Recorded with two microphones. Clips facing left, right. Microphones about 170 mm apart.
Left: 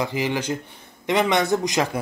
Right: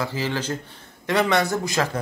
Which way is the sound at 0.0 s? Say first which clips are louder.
Left 2 dB; 15° left (ahead or behind).